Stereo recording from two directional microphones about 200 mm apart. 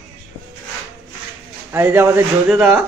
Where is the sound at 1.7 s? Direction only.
10° right (ahead or behind).